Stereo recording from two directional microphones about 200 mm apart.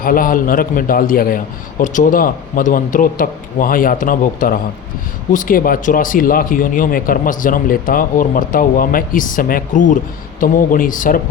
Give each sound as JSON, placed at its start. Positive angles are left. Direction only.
{"t": 0.0, "sound": "a man's voice", "side_deg": 45}